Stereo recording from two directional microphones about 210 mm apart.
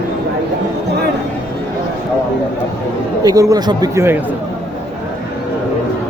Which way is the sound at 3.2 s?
15° right (ahead or behind).